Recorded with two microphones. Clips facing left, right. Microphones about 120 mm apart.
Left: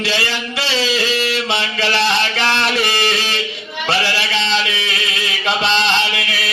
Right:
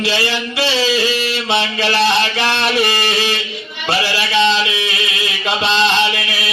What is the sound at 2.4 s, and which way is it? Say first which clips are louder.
Speech: right 1 dB; 15° right (ahead or behind).